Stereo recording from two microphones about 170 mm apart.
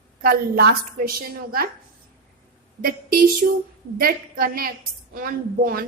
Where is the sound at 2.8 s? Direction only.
60° right (ahead or behind).